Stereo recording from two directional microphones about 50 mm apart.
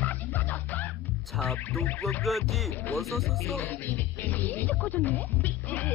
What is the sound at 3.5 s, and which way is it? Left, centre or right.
Music, left.